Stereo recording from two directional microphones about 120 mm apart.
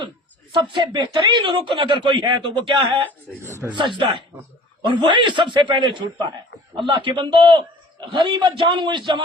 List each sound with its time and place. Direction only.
0.5 s a man's voice: 40° right (ahead or behind)